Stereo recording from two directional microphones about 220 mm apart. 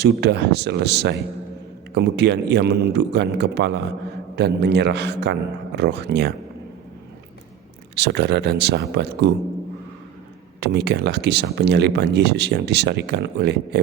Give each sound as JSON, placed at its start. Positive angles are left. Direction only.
{"t": 0.0, "sound": "speech", "side_deg": -50}
{"t": 7.9, "sound": "speech", "side_deg": -50}
{"t": 10.6, "sound": "speech", "side_deg": -50}